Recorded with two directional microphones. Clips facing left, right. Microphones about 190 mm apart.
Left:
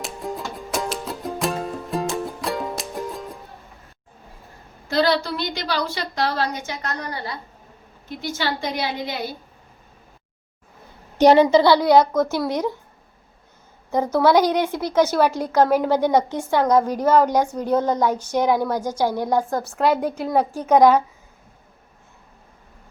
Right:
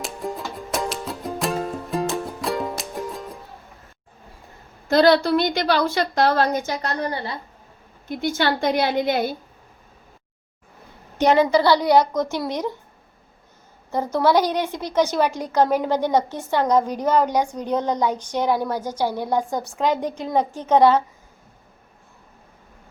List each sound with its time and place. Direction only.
0.0 s music: centre (ahead or behind)
4.9 s a woman's voice: 50° right (ahead or behind); by 7.3 s 30° right (ahead or behind)
8.2 s a woman's voice: 55° right (ahead or behind)
11.2 s a woman's voice: 35° left (ahead or behind)
11.5 s a woman's voice: 15° left (ahead or behind)
11.8 s a child's voice: 15° right (ahead or behind)
12.5 s a woman's voice: 10° left (ahead or behind)
13.9 s a woman's voice: 10° left (ahead or behind)
15.3 s a child's voice: 15° right (ahead or behind)
15.7 s a woman's voice: 10° left (ahead or behind)
17.0 s a child's voice: 15° right (ahead or behind)
17.4 s a woman's voice: 5° left (ahead or behind)